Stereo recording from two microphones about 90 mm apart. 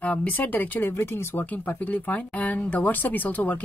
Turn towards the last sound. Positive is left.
turn(degrees=20)  # may be behind; listen again after turning